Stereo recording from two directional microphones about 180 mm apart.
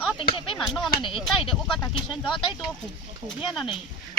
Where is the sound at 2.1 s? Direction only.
Centre (ahead or behind).